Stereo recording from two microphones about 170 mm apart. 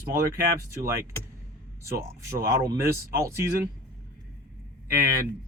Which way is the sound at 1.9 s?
15° right (ahead or behind).